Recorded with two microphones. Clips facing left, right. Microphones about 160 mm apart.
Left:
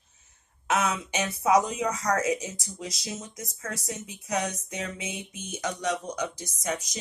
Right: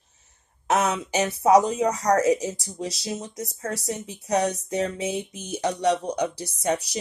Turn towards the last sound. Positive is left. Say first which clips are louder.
# right 7 dB
turn(degrees=-35)  # may be behind; listen again after turning